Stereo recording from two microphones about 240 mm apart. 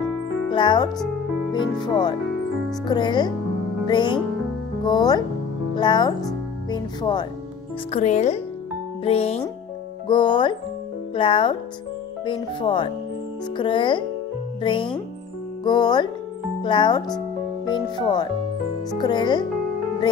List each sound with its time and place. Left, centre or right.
0.5 s speech: centre
7.9 s speech: left